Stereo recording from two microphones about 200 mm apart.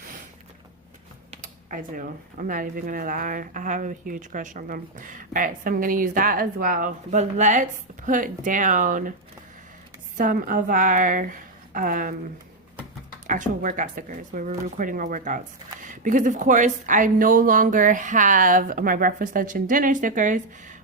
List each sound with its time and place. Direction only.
1.3 s speech: 40° right (ahead or behind)
10.2 s a woman's voice: 45° right (ahead or behind)
13.2 s speech: 40° right (ahead or behind)